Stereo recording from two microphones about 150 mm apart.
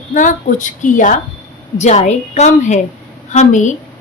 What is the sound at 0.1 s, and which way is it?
A woman's voice, 60° left (ahead or behind).